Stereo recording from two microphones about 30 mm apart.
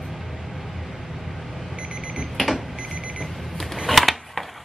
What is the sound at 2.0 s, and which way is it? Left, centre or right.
Alarm clock, centre.